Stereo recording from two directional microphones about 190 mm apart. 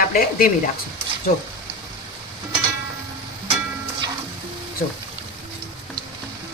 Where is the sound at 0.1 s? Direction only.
50° left (ahead or behind).